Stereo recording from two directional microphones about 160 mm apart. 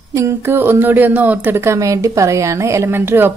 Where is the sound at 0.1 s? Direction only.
15° right (ahead or behind).